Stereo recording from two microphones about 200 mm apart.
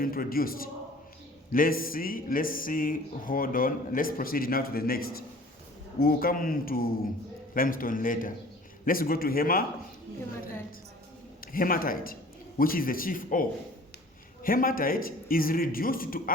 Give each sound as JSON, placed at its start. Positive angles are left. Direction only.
{"t": 0.0, "sound": "speech", "side_deg": 45}
{"t": 11.3, "sound": "speech", "side_deg": 45}